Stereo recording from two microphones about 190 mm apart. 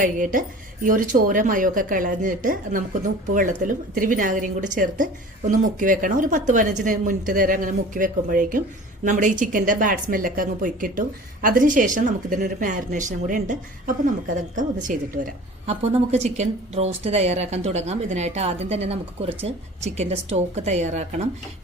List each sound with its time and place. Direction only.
0.0 s a woman's voice: 45° right (ahead or behind)
15.7 s speech: 35° right (ahead or behind)